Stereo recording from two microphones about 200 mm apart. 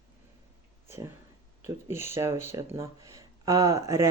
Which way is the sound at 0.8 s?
15° right (ahead or behind).